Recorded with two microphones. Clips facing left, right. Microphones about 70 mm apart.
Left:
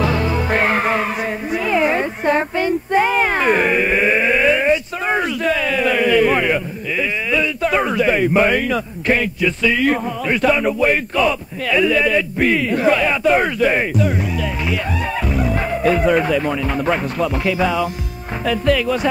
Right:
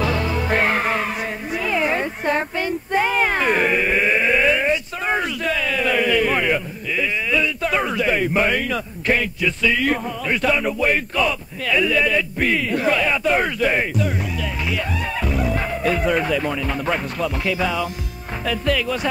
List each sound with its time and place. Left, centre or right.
0.0 s music: left
1.5 s a sound: left
13.2 s speech: centre
15.2 s music: centre
16.2 s speech: centre